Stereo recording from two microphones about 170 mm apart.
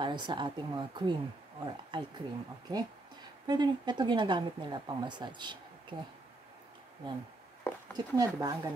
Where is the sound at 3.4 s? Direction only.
25° right (ahead or behind).